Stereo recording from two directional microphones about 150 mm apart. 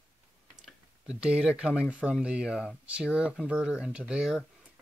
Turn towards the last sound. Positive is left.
turn(degrees=-5)  # may be behind; listen again after turning